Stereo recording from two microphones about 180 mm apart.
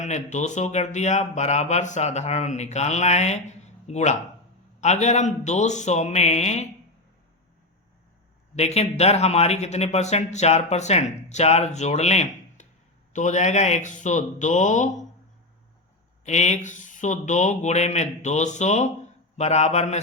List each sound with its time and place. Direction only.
0.0 s speech: 40° left (ahead or behind)
8.5 s speech: 35° left (ahead or behind)
16.2 s speech: 40° left (ahead or behind)